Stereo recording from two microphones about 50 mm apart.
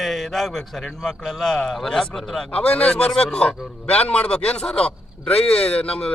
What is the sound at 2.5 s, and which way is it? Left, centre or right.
Speech, left.